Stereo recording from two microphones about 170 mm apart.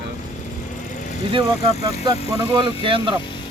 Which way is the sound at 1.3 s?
30° right (ahead or behind).